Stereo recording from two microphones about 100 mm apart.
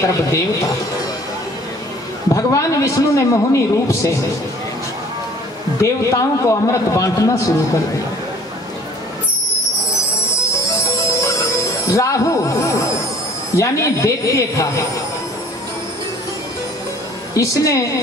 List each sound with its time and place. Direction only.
0.0 s a man's voice: 30° left (ahead or behind)
2.3 s a man's voice: 30° left (ahead or behind)
5.8 s a man's voice: 30° left (ahead or behind)
10.9 s music: 30° left (ahead or behind)
11.9 s a man's voice: 30° left (ahead or behind)
17.3 s a woman's voice: 30° left (ahead or behind)